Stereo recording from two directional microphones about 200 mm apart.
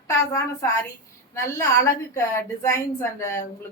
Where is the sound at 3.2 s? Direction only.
15° left (ahead or behind).